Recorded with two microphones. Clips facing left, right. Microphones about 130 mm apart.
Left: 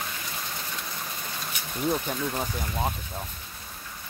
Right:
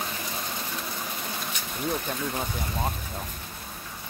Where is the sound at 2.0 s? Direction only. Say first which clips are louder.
Left 1 dB; 5° left (ahead or behind).